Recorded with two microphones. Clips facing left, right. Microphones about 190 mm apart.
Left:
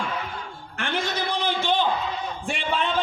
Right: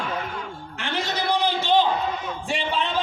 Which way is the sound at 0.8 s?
50° left (ahead or behind).